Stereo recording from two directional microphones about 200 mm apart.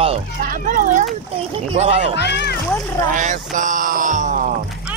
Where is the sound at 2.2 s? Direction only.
55° left (ahead or behind).